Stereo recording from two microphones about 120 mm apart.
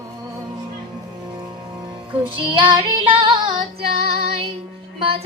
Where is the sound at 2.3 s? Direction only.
45° right (ahead or behind).